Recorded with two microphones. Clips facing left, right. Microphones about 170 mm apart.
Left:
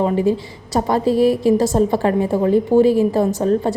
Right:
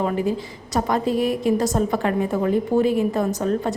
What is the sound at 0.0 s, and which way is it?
A woman's voice, 30° left (ahead or behind).